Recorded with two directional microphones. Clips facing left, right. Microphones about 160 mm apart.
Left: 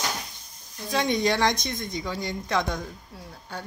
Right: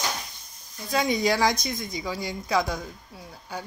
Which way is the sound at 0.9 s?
10° right (ahead or behind).